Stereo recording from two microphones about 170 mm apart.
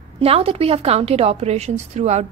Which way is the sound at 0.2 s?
35° right (ahead or behind).